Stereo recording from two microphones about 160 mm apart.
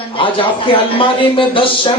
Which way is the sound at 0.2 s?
35° left (ahead or behind).